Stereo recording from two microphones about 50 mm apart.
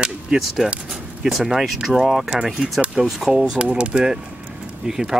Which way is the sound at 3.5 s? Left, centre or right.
Right.